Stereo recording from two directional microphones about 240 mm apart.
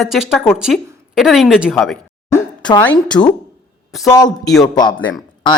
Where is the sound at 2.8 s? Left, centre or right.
Centre.